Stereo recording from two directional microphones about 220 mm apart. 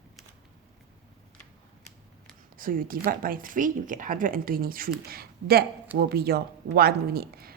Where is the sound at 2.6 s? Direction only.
40° right (ahead or behind).